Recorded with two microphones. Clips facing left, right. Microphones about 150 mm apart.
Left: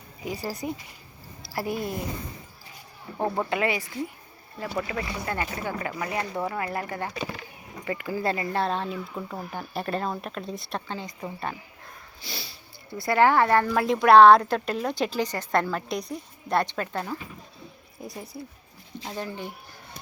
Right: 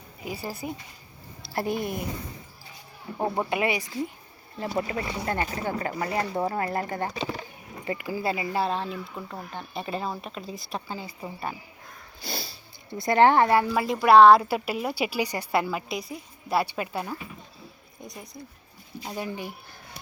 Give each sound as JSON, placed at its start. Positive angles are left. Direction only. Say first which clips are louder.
{"t": 0.3, "sound": "speech", "louder": "left 2 dB", "side_deg": -30}
{"t": 3.2, "sound": "a woman's voice", "louder": "even", "side_deg": -15}
{"t": 4.8, "sound": "speech", "louder": "right 1 dB", "side_deg": -30}
{"t": 7.9, "sound": "speech", "louder": "left 1 dB", "side_deg": -15}
{"t": 12.2, "sound": "cat", "louder": "right 5 dB", "side_deg": -45}
{"t": 12.9, "sound": "speech", "louder": "right 1 dB", "side_deg": -20}
{"t": 13.6, "sound": "a woman's voice", "louder": "left 2 dB", "side_deg": -5}
{"t": 18.0, "sound": "speech", "louder": "left 4 dB", "side_deg": 5}
{"t": 18.9, "sound": "a woman's voice", "louder": "right 1 dB", "side_deg": -10}